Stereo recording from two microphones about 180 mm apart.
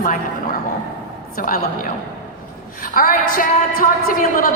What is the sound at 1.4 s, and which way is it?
Speech, 50° left (ahead or behind).